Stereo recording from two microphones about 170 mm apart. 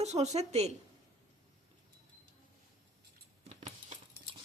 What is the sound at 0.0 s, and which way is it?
Speech, 40° right (ahead or behind).